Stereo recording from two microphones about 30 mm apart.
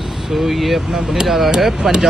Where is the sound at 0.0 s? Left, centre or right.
Centre.